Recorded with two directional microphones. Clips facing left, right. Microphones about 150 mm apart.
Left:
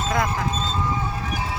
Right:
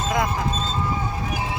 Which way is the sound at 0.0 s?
15° right (ahead or behind).